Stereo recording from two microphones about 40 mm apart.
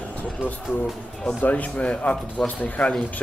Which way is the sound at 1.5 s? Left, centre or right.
Left.